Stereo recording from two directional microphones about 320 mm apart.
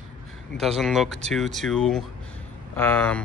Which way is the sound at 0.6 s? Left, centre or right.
Centre.